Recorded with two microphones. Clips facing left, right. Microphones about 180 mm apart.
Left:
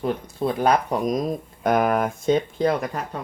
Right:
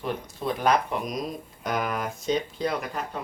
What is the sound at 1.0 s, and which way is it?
Speech, 50° left (ahead or behind).